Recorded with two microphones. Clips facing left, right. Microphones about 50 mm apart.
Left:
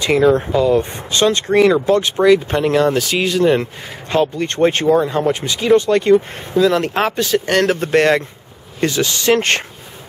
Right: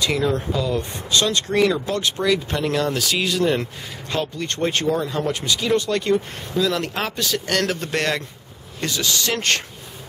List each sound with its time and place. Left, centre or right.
0.0 s speech: left